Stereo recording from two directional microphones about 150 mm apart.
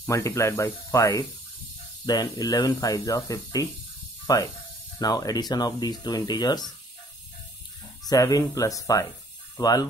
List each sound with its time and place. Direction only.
0.0 s speech: 20° left (ahead or behind)
8.1 s speech: 25° left (ahead or behind)